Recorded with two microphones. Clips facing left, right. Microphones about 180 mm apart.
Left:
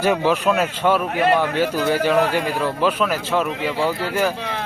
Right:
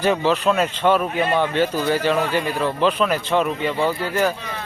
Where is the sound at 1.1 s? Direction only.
70° left (ahead or behind).